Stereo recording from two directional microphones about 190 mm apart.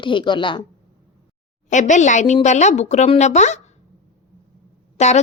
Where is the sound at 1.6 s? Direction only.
40° left (ahead or behind).